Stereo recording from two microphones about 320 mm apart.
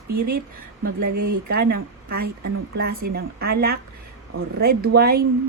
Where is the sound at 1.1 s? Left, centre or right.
Right.